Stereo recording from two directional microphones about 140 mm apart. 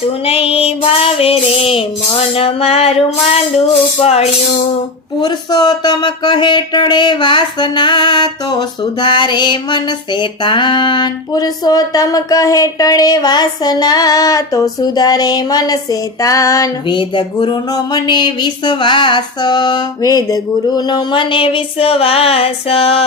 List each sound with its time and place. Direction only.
0.3 s female singing: 45° left (ahead or behind)
5.2 s speech: 30° left (ahead or behind)
17.0 s speech: 35° left (ahead or behind)